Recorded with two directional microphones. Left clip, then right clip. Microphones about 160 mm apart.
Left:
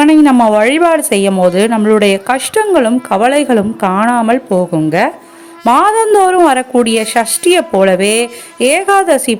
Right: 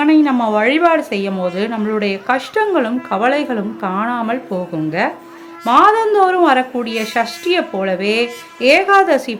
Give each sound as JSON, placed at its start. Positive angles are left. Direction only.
{"t": 0.0, "sound": "a woman's voice", "side_deg": 45}